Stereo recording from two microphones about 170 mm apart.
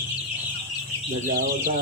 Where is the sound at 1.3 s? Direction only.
60° right (ahead or behind).